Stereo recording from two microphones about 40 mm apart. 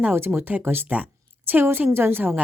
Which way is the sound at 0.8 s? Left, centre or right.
Right.